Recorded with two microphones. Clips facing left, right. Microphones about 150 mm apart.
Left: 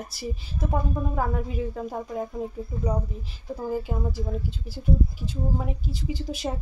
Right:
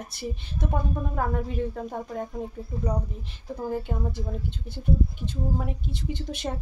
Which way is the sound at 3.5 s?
5° left (ahead or behind).